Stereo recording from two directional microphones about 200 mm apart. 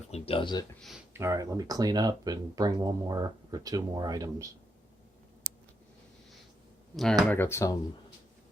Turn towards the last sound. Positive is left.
turn(degrees=15)  # may be behind; listen again after turning